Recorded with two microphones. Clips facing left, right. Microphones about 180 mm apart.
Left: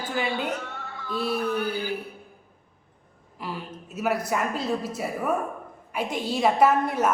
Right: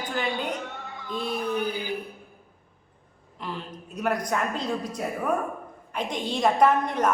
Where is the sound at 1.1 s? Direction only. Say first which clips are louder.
Left 3 dB; 5° left (ahead or behind).